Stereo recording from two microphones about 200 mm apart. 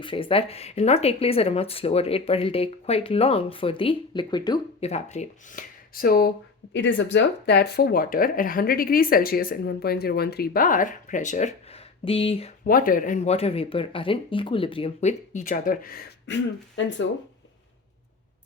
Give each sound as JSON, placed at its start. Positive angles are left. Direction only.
{"t": 0.0, "sound": "speech", "side_deg": 25}
{"t": 6.7, "sound": "speech", "side_deg": 65}
{"t": 12.6, "sound": "speech", "side_deg": 45}
{"t": 16.2, "sound": "speech", "side_deg": 65}